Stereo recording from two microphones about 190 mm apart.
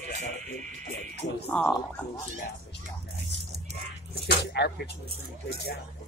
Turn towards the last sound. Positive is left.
turn(degrees=60)  # may be behind; listen again after turning